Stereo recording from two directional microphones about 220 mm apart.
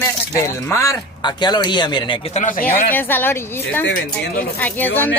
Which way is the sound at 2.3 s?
35° left (ahead or behind).